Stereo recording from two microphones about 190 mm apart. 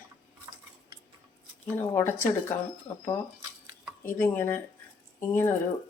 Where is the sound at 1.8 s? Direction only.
15° left (ahead or behind).